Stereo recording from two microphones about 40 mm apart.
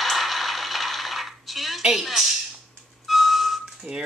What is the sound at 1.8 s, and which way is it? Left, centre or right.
Speech, centre.